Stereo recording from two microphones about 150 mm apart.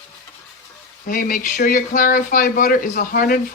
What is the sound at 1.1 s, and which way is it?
Speech, 65° left (ahead or behind).